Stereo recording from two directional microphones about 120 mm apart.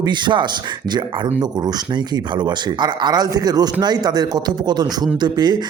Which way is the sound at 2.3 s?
40° right (ahead or behind).